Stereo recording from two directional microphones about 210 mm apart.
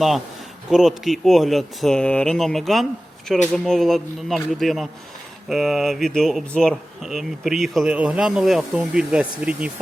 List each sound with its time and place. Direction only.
0.7 s speech: centre (ahead or behind)